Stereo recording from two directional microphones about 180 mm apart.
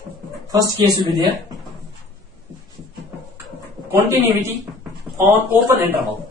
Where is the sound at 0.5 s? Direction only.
20° right (ahead or behind).